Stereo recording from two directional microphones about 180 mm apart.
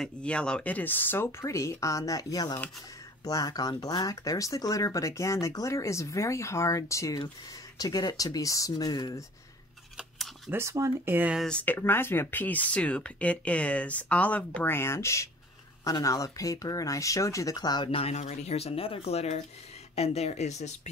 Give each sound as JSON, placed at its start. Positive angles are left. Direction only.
{"t": 0.0, "sound": "speech", "side_deg": 5}
{"t": 9.9, "sound": "a sound", "side_deg": 0}
{"t": 10.5, "sound": "speech", "side_deg": -15}
{"t": 11.4, "sound": "speech", "side_deg": 10}